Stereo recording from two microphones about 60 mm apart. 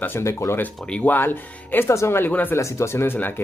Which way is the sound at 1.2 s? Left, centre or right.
Left.